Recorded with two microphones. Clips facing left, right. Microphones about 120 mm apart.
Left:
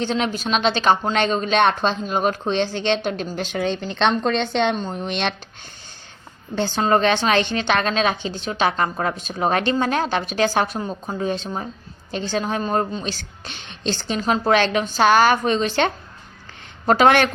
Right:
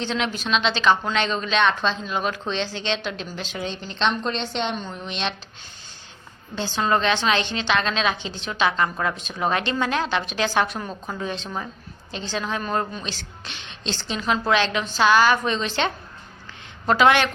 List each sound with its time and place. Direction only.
0.0 s a woman's voice: 40° left (ahead or behind); by 4.1 s 55° left (ahead or behind)
4.1 s a woman's voice: 45° left (ahead or behind)
6.6 s a woman's voice: 50° left (ahead or behind)
10.8 s a woman's voice: 25° left (ahead or behind)
13.1 s a woman's voice: 45° left (ahead or behind)